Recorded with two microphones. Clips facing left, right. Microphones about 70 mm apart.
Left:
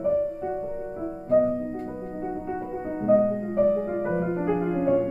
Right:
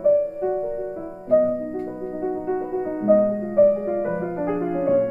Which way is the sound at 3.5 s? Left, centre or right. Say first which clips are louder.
Right 7 dB; right.